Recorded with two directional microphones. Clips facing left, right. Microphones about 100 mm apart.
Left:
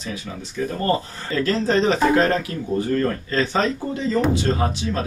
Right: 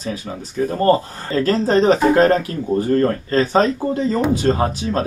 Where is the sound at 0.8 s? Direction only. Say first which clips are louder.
Right 8 dB; 35° right (ahead or behind).